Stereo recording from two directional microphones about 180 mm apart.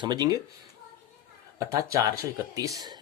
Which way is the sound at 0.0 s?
20° right (ahead or behind).